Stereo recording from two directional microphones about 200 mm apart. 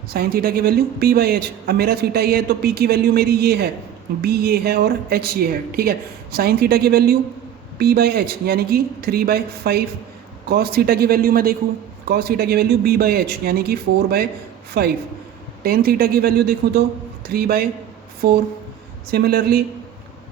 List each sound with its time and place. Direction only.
0.1 s speech: 50° right (ahead or behind)